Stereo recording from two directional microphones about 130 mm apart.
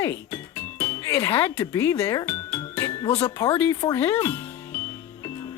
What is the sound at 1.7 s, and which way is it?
Speech, 25° left (ahead or behind).